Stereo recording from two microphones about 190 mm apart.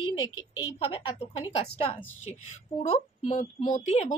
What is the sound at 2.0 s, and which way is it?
Speech, 90° left.